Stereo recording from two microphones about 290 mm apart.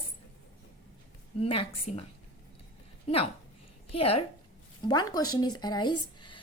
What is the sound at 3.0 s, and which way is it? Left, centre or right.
A woman's voice, left.